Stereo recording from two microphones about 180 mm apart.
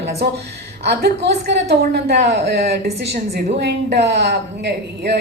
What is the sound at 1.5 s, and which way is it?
A woman's voice, 70° right (ahead or behind).